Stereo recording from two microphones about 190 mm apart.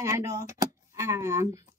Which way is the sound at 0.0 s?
15° right (ahead or behind).